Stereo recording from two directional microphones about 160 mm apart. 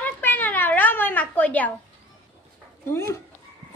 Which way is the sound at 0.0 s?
10° left (ahead or behind).